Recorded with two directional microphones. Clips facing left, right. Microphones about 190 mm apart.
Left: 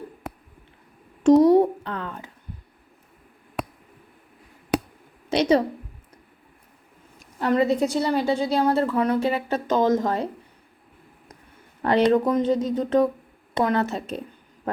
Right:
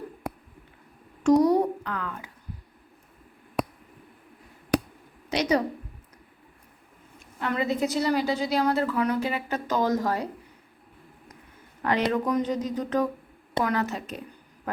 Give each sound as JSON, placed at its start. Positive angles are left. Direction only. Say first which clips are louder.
{"t": 1.4, "sound": "a woman's voice", "louder": "left 5 dB", "side_deg": 25}
{"t": 5.3, "sound": "a woman's voice", "louder": "left 5 dB", "side_deg": 30}
{"t": 7.3, "sound": "a woman's voice", "louder": "left 6 dB", "side_deg": 35}
{"t": 11.8, "sound": "a sound", "louder": "left 6 dB", "side_deg": 30}
{"t": 12.1, "sound": "a woman's voice", "louder": "left 5 dB", "side_deg": 25}